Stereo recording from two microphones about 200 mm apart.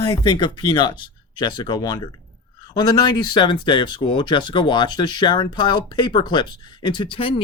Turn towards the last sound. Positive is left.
turn(degrees=25)  # may be behind; listen again after turning